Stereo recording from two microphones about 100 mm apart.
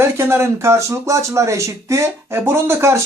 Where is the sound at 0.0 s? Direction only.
25° right (ahead or behind).